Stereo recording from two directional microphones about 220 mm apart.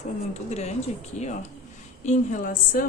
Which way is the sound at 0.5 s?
30° left (ahead or behind).